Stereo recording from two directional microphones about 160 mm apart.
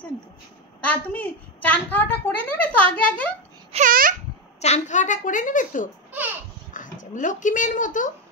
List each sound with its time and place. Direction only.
0.7 s a woman's voice: 10° left (ahead or behind)
3.7 s speech: 55° right (ahead or behind)
4.6 s a woman's voice: 45° left (ahead or behind)